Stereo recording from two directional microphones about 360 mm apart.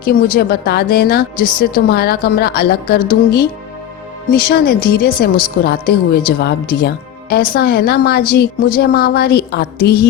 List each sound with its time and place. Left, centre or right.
0.0 s a woman's voice: left
4.4 s a woman's voice: left